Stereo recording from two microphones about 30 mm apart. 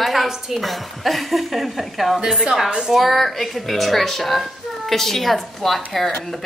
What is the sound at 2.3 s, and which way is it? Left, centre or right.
A woman's voice, centre.